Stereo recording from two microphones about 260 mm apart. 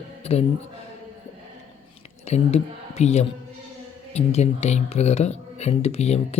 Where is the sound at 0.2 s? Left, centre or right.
Left.